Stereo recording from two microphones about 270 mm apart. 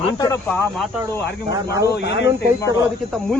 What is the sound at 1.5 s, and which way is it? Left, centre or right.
Speech, centre.